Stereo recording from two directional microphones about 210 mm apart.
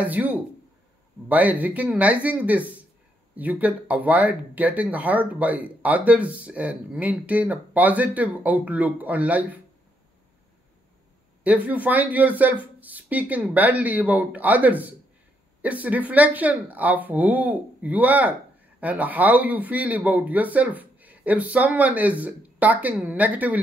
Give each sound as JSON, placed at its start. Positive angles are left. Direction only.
{"t": 0.0, "sound": "speech", "side_deg": -5}
{"t": 11.4, "sound": "speech", "side_deg": -5}